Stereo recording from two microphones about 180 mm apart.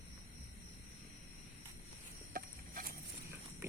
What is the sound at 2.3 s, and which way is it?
Insect, 50° right (ahead or behind).